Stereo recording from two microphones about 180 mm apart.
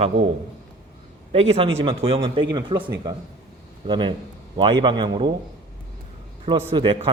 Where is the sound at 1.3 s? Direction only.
30° right (ahead or behind).